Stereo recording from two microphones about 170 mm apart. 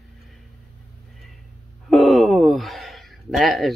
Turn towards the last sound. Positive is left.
turn(degrees=0)  # may be behind; listen again after turning